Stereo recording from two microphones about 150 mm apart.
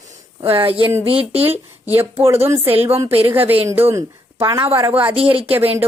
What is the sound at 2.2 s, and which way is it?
A woman's voice, 15° right (ahead or behind).